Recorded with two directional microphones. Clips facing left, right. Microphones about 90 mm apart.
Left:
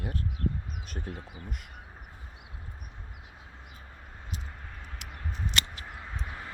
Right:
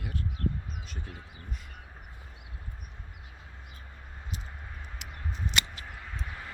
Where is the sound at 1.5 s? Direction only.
65° left (ahead or behind).